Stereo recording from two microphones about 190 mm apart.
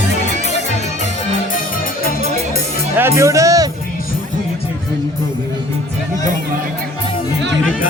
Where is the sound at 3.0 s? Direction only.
15° right (ahead or behind).